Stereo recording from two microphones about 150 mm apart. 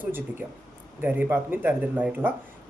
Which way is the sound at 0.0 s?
15° right (ahead or behind).